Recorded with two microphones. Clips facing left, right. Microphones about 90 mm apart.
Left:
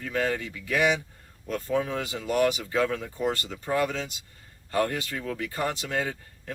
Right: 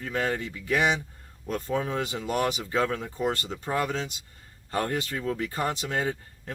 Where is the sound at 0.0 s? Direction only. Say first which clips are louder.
Left 1 dB; 30° right (ahead or behind).